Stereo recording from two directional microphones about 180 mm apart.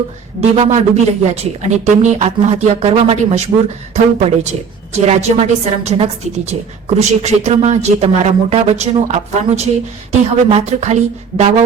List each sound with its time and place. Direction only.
0.5 s a woman's voice: 35° right (ahead or behind)